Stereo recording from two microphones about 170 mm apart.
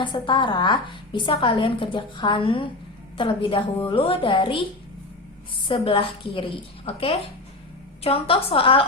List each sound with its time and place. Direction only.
0.0 s a woman's voice: 30° left (ahead or behind)
5.6 s a woman's voice: 30° left (ahead or behind)